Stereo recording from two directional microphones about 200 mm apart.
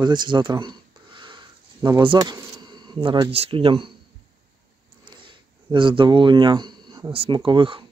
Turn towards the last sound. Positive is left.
turn(degrees=-25)  # may be behind; listen again after turning